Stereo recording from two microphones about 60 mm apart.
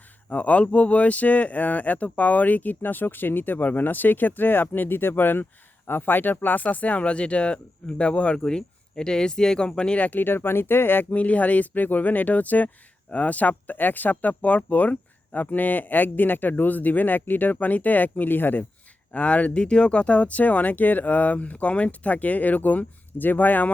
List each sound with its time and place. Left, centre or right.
0.3 s speech: left
11.1 s speech: left
19.1 s speech: left